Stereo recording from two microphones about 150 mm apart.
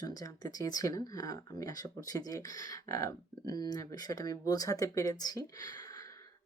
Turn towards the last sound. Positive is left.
turn(degrees=25)  # may be behind; listen again after turning